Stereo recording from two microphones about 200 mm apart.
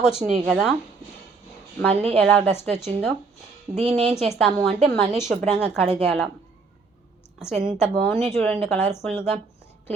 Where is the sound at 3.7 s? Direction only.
25° right (ahead or behind).